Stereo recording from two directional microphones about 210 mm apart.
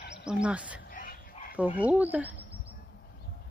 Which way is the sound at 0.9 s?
40° left (ahead or behind).